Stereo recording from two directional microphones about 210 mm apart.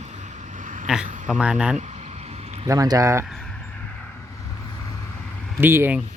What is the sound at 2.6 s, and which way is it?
Speech, 15° right (ahead or behind).